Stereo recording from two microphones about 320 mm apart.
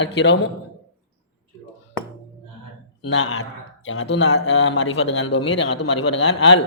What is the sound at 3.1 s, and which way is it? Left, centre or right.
A man's voice, left.